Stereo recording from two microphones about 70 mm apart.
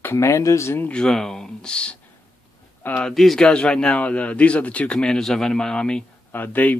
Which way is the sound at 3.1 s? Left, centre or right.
Centre.